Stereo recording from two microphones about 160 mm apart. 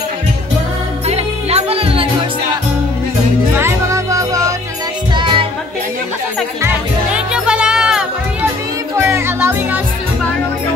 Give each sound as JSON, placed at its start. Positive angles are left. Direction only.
{"t": 1.0, "sound": "music", "side_deg": -40}
{"t": 3.5, "sound": "music", "side_deg": -15}
{"t": 5.1, "sound": "music", "side_deg": -30}
{"t": 6.6, "sound": "music", "side_deg": -5}
{"t": 8.9, "sound": "music", "side_deg": -15}